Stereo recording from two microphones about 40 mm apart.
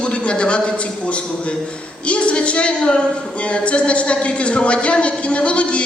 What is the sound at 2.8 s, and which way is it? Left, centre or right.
Speech, centre.